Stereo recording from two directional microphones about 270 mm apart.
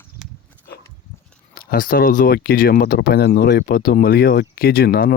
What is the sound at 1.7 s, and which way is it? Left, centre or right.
Speech, left.